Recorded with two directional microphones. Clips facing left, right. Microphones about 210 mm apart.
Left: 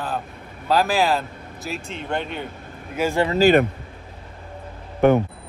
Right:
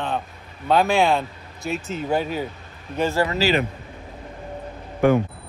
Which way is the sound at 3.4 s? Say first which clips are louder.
Left 9 dB; 55° left (ahead or behind).